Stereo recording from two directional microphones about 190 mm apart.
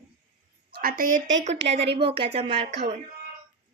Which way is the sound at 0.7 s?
50° right (ahead or behind).